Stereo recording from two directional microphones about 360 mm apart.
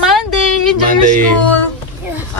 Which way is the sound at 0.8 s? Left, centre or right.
Right.